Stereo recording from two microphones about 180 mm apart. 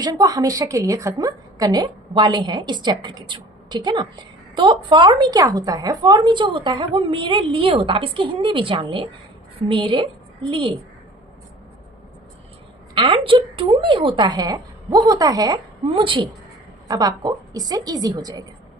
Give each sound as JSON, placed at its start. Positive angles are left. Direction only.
{"t": 0.0, "sound": "a woman's voice", "side_deg": -20}
{"t": 12.9, "sound": "a woman's voice", "side_deg": -30}